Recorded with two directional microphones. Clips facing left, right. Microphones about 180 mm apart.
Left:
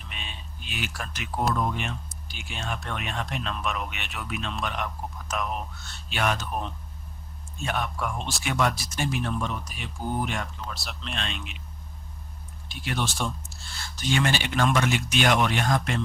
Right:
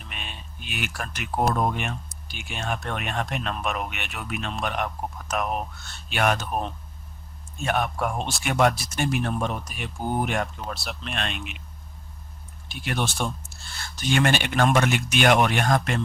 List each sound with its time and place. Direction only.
0.1 s speech: 55° right (ahead or behind)
6.1 s speech: 55° right (ahead or behind)
12.6 s speech: 55° right (ahead or behind)